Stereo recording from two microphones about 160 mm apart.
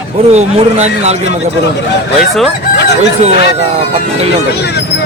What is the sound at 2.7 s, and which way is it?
Chicken, 90° left.